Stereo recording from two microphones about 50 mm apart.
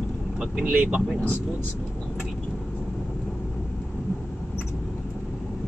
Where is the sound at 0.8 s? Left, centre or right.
Right.